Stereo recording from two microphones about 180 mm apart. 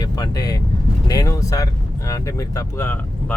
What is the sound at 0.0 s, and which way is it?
Speech, 20° left (ahead or behind).